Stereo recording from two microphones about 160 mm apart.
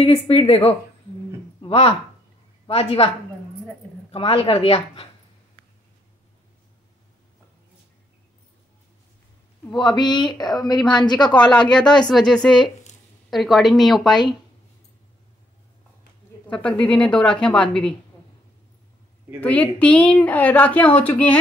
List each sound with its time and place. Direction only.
0.0 s a woman's voice: 35° left (ahead or behind)
1.6 s a woman's voice: 35° left (ahead or behind)
4.1 s a woman's voice: 35° left (ahead or behind)
9.8 s a woman's voice: 30° left (ahead or behind)
11.5 s speech: 5° left (ahead or behind)
16.4 s a woman's voice: 5° left (ahead or behind)
19.4 s a woman's voice: 10° left (ahead or behind)